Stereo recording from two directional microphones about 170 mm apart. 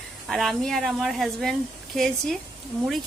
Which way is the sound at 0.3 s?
Centre (ahead or behind).